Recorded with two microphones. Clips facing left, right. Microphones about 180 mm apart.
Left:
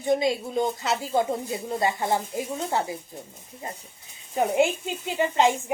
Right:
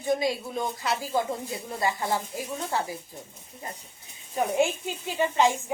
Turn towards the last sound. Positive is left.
turn(degrees=20)  # may be behind; listen again after turning